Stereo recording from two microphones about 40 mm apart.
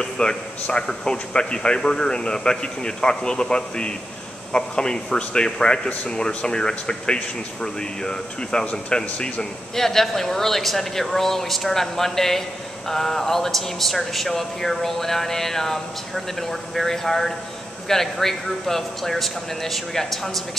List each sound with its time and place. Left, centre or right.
0.0 s speech: left
9.8 s speech: centre